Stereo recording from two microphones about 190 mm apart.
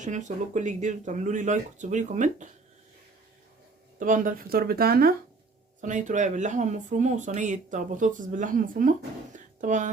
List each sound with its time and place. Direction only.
0.0 s speech: 40° right (ahead or behind)
4.0 s speech: 45° right (ahead or behind)
5.8 s speech: 40° right (ahead or behind)